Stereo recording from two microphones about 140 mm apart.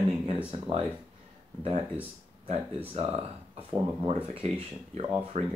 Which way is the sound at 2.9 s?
45° right (ahead or behind).